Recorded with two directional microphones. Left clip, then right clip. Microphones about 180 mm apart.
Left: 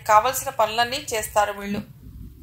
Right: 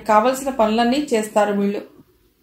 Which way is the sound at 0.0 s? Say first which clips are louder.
Right 2 dB; 40° left (ahead or behind).